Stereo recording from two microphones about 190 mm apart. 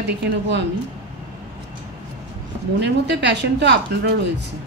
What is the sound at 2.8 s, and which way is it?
A woman's voice, 65° right (ahead or behind).